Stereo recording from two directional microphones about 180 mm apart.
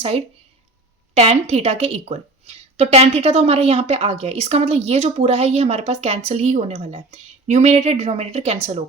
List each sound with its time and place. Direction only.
1.1 s a woman's voice: 35° right (ahead or behind)